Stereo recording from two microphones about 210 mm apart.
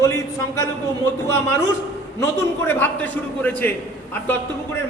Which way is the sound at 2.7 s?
10° left (ahead or behind).